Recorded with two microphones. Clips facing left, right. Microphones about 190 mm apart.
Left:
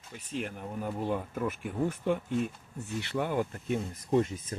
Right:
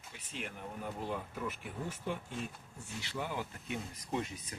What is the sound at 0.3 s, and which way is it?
Speech, 45° left (ahead or behind).